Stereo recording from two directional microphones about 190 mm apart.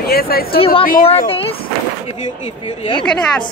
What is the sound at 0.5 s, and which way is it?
Speech, 30° left (ahead or behind).